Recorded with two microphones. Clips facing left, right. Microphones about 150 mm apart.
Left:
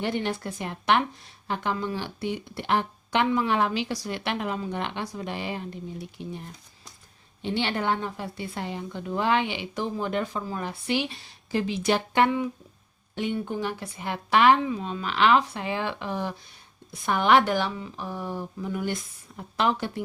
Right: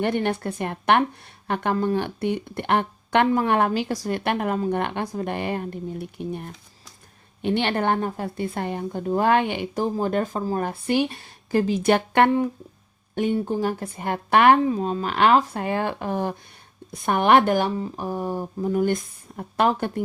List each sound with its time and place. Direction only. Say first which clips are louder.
0.0 s speech: right 5 dB; 55° right (ahead or behind)
13.1 s speech: right 6 dB; 40° right (ahead or behind); by 14.6 s 55° right (ahead or behind)
14.6 s speech: right 6 dB; 40° right (ahead or behind)